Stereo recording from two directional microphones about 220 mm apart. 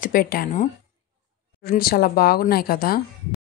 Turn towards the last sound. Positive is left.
turn(degrees=45)  # may be behind; listen again after turning